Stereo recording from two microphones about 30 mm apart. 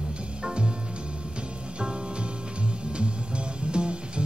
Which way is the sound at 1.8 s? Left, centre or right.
Right.